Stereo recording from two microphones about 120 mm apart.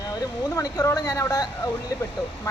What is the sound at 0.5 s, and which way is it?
Speech, 30° left (ahead or behind).